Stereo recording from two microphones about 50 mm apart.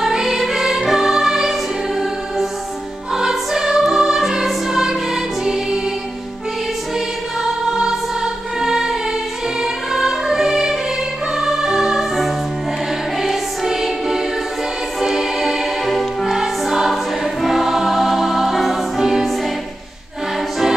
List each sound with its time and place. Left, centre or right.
0.0 s music: centre
7.7 s music: centre
13.2 s music: centre